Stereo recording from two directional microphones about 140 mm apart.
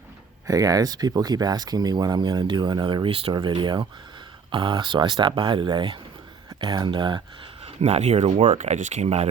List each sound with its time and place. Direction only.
0.4 s speech: 25° right (ahead or behind)
7.6 s speech: 50° right (ahead or behind)
8.4 s speech: 60° right (ahead or behind)